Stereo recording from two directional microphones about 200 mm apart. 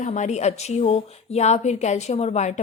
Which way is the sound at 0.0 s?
35° left (ahead or behind).